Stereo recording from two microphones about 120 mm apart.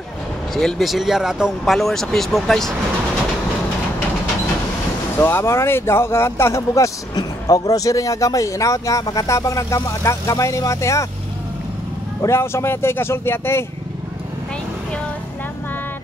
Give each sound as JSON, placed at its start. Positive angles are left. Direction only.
{"t": 0.6, "sound": "speech", "side_deg": 0}
{"t": 5.2, "sound": "speech", "side_deg": 20}
{"t": 12.2, "sound": "speech", "side_deg": 20}